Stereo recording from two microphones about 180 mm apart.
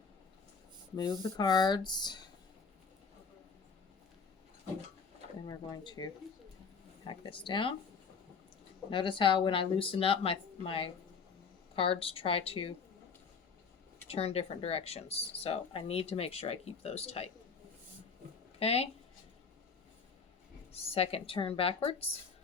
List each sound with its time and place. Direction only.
0.9 s speech: 20° left (ahead or behind)
5.5 s speech: 20° left (ahead or behind)
7.1 s speech: 30° left (ahead or behind)
8.9 s speech: 30° left (ahead or behind)
14.1 s speech: 35° left (ahead or behind)
18.6 s speech: 35° left (ahead or behind)
20.7 s speech: 35° left (ahead or behind)